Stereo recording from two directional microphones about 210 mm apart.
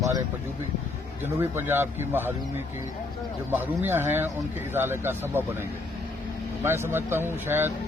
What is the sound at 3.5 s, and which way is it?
Speech, 10° right (ahead or behind).